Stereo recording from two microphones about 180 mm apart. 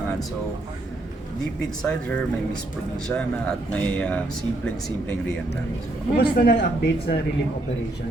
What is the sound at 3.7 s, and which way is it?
Speech, 5° left (ahead or behind).